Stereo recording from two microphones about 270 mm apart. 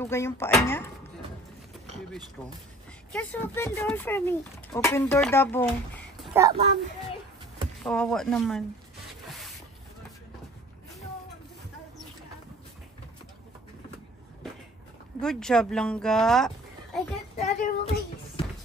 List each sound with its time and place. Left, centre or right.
0.0 s speech: centre
2.0 s speech: centre
7.8 s speech: centre
15.1 s speech: centre
17.5 s a sound: left